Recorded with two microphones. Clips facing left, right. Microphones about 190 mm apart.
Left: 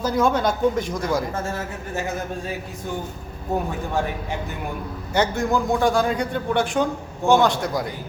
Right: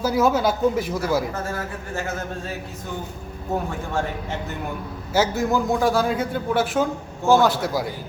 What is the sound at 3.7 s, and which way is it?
Speech, 15° left (ahead or behind).